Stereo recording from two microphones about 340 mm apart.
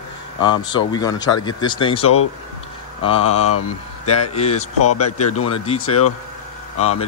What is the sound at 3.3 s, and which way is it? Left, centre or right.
Speech, left.